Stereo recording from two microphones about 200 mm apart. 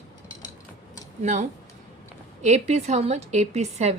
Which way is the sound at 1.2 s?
40° right (ahead or behind).